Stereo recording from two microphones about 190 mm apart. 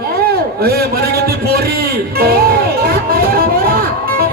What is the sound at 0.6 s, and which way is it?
Music, 55° right (ahead or behind).